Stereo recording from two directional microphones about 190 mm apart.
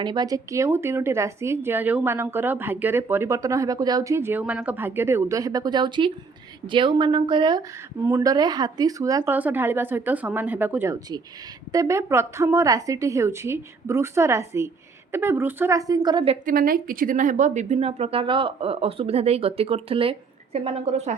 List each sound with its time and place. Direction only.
0.0 s a woman's voice: 20° right (ahead or behind)
16.5 s speech: 50° right (ahead or behind)